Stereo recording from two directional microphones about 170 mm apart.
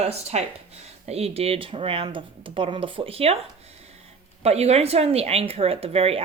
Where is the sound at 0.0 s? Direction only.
40° right (ahead or behind).